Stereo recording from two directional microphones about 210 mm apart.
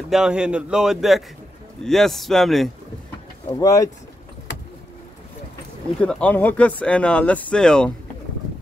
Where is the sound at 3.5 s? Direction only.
15° left (ahead or behind).